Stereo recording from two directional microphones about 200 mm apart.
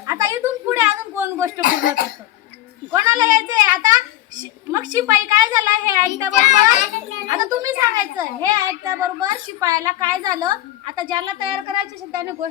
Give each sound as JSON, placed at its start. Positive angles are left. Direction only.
{"t": 0.1, "sound": "a sound", "side_deg": -15}
{"t": 1.6, "sound": "speech", "side_deg": 45}
{"t": 2.9, "sound": "a woman's voice", "side_deg": -20}
{"t": 3.4, "sound": "a sound", "side_deg": -20}
{"t": 4.9, "sound": "a woman's voice", "side_deg": -20}
{"t": 6.3, "sound": "a child's voice", "side_deg": 35}
{"t": 7.3, "sound": "a woman's voice", "side_deg": -15}